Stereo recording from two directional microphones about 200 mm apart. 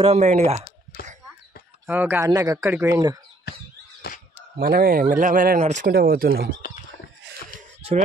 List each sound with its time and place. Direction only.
0.0 s speech: 35° right (ahead or behind)
1.9 s speech: 10° right (ahead or behind)
4.0 s a sound: 50° left (ahead or behind)
4.6 s speech: 50° right (ahead or behind)